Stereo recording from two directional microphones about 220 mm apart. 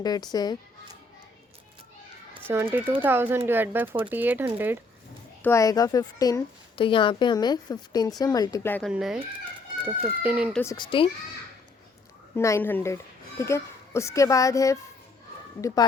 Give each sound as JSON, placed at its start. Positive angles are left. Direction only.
{"t": 0.0, "sound": "speech", "side_deg": 20}
{"t": 2.5, "sound": "speech", "side_deg": -10}
{"t": 5.4, "sound": "speech", "side_deg": 15}
{"t": 8.9, "sound": "speech", "side_deg": -5}
{"t": 10.6, "sound": "speech", "side_deg": 15}
{"t": 12.4, "sound": "speech", "side_deg": 10}